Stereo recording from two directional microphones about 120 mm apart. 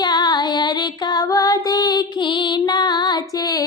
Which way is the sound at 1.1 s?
30° left (ahead or behind).